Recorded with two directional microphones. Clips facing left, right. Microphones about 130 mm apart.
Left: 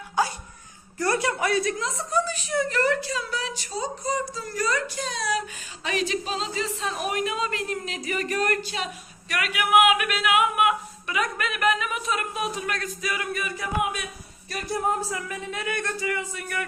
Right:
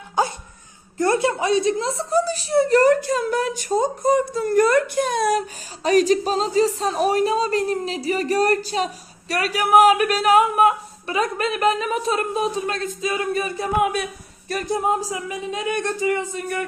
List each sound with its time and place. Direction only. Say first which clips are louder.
0.2 s dog: right 3 dB; 20° right (ahead or behind)
0.9 s a woman's voice: right 5 dB; 25° right (ahead or behind); by 5.4 s 55° right (ahead or behind)
5.8 s speech: right 10 dB; 40° right (ahead or behind)
14.7 s speech: right 4 dB; 20° right (ahead or behind)